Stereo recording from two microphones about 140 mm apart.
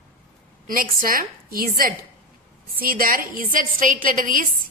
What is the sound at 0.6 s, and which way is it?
A woman's voice, 90° right.